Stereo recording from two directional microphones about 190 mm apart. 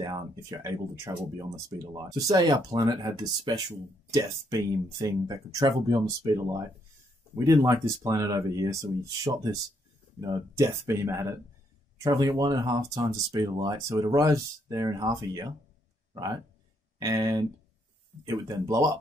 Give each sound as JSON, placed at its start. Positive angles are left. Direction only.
{"t": 0.0, "sound": "speech", "side_deg": -20}
{"t": 17.0, "sound": "speech", "side_deg": -20}